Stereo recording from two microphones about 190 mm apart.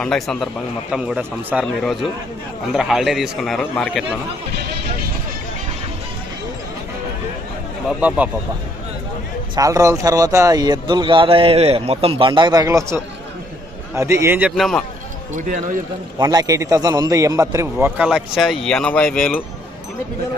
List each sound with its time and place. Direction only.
0.0 s a man's voice: centre (ahead or behind)
7.9 s a man's voice: 5° right (ahead or behind)
9.6 s a man's voice: 15° right (ahead or behind); by 14.8 s centre (ahead or behind)
15.4 s speech: 40° right (ahead or behind)
16.1 s a man's voice: 20° right (ahead or behind); by 19.4 s 5° left (ahead or behind)